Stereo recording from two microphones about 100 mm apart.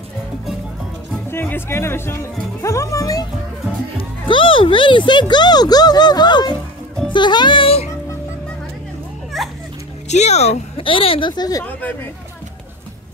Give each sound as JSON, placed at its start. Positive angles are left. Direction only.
{"t": 1.3, "sound": "speech", "side_deg": 20}
{"t": 2.6, "sound": "music", "side_deg": 30}
{"t": 4.3, "sound": "speech", "side_deg": 60}
{"t": 9.3, "sound": "children playing", "side_deg": 0}
{"t": 10.2, "sound": "speech", "side_deg": 90}
{"t": 11.6, "sound": "speech", "side_deg": 15}